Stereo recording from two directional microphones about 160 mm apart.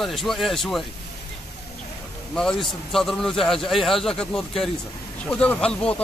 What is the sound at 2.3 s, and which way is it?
A man's voice, 5° left (ahead or behind).